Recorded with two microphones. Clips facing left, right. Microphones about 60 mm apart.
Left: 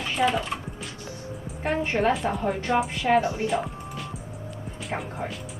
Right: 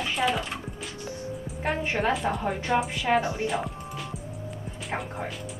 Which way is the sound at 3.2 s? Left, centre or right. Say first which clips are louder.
Left 3 dB; right.